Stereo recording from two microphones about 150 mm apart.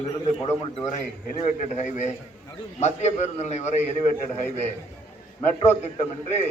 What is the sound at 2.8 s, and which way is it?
Speech, 50° left (ahead or behind).